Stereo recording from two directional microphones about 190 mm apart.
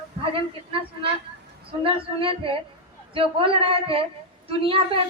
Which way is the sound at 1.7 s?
30° right (ahead or behind).